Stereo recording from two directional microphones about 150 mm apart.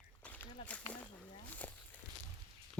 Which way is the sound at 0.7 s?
10° left (ahead or behind).